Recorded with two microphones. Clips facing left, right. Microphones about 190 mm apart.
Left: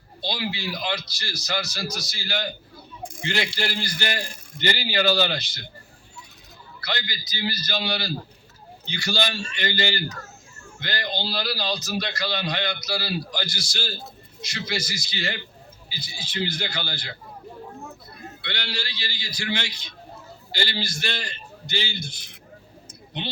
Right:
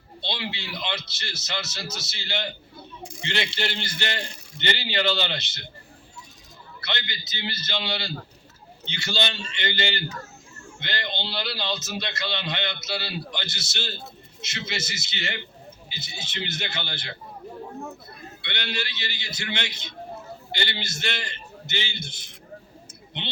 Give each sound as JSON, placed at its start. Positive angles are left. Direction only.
{"t": 0.3, "sound": "a man's voice", "side_deg": -25}
{"t": 6.8, "sound": "a man's voice", "side_deg": -25}
{"t": 18.4, "sound": "a man's voice", "side_deg": -20}